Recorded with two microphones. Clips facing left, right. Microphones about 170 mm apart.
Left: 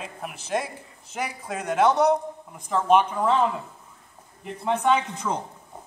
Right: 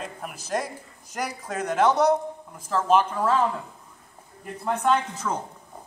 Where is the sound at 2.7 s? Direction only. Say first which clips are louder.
Left 1 dB; 5° right (ahead or behind).